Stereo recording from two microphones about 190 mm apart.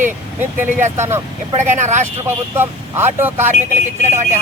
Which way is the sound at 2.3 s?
10° right (ahead or behind).